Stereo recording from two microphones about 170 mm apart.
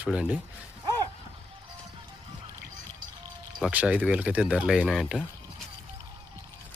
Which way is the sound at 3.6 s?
5° right (ahead or behind).